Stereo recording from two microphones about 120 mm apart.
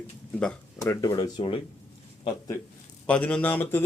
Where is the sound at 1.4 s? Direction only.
45° left (ahead or behind).